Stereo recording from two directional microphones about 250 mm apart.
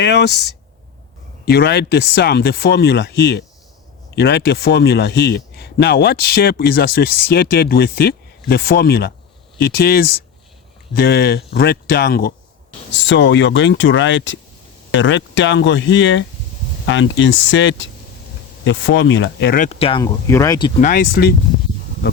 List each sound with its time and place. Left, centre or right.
0.0 s speech: left
1.5 s speech: left
19.9 s speech: centre
20.8 s speech: left